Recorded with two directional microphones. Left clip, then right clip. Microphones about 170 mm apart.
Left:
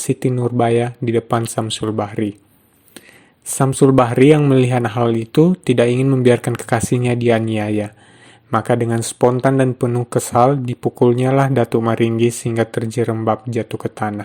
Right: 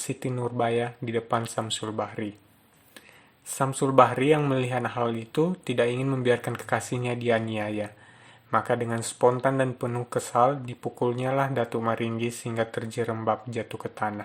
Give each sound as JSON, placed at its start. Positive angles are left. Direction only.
{"t": 0.0, "sound": "speech", "side_deg": 40}
{"t": 3.5, "sound": "speech", "side_deg": 40}
{"t": 6.1, "sound": "speech", "side_deg": 30}
{"t": 6.3, "sound": "speech", "side_deg": 45}